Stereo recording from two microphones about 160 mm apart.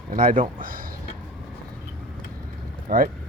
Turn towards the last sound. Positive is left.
turn(degrees=-65)  # may be behind; listen again after turning